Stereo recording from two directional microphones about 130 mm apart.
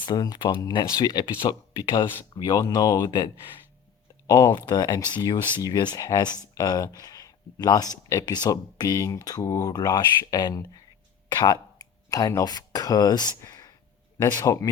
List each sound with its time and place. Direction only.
0.0 s speech: 35° left (ahead or behind)
4.3 s speech: 25° left (ahead or behind)
13.4 s a sound: 30° left (ahead or behind)
14.2 s speech: 25° left (ahead or behind)